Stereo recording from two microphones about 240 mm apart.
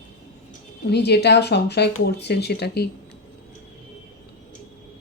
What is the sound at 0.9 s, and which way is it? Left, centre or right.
A woman's voice, left.